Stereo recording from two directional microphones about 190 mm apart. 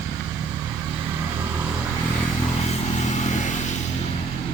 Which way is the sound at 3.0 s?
40° left (ahead or behind).